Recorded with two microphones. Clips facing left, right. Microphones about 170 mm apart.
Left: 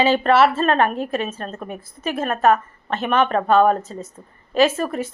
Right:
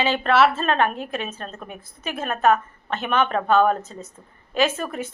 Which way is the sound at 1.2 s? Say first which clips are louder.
Left 5 dB; 5° left (ahead or behind).